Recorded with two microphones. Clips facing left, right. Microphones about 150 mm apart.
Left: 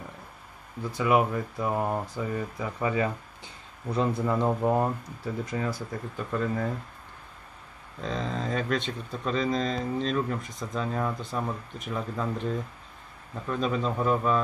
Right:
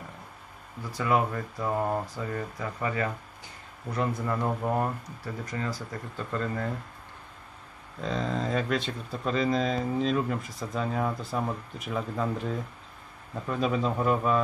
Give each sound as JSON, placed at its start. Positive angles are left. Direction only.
{"t": 0.9, "sound": "speech", "side_deg": 15}
{"t": 3.9, "sound": "speech", "side_deg": 30}
{"t": 4.3, "sound": "speech", "side_deg": 15}
{"t": 6.1, "sound": "speech", "side_deg": 10}
{"t": 8.0, "sound": "speech", "side_deg": 0}